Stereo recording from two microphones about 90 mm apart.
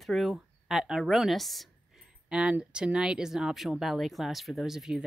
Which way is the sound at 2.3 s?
10° right (ahead or behind).